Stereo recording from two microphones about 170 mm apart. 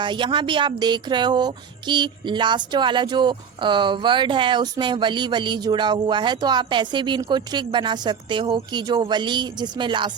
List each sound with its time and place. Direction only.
0.0 s speech: 30° right (ahead or behind)